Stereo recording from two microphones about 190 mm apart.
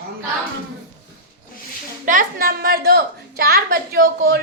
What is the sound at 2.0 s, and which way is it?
A woman's voice, 45° right (ahead or behind).